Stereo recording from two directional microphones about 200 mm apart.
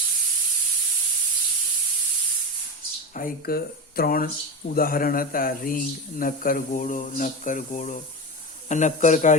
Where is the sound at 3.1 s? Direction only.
45° left (ahead or behind).